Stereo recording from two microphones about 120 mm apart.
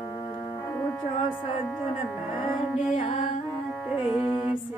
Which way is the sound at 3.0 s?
55° left (ahead or behind).